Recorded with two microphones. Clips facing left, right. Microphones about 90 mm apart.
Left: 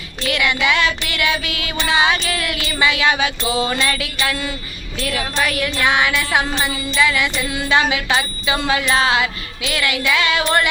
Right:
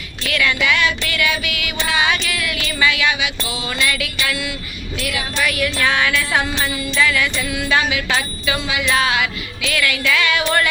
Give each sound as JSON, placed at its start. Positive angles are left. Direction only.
{"t": 0.3, "sound": "music", "side_deg": 25}
{"t": 8.5, "sound": "music", "side_deg": 45}